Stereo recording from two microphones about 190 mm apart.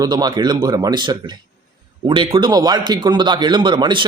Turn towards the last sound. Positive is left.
turn(degrees=-25)  # may be behind; listen again after turning